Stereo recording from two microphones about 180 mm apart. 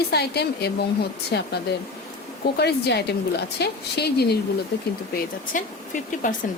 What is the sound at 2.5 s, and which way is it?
A woman's voice, 65° left (ahead or behind).